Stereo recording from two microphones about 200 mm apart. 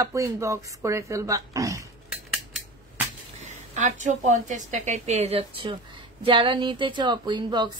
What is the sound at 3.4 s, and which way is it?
A woman's voice, 35° right (ahead or behind).